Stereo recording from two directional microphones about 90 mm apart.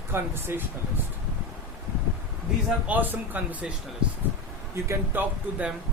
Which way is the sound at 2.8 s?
20° right (ahead or behind).